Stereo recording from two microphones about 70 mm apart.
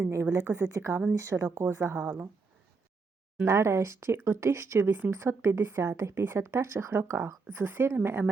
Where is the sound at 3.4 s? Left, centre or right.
Right.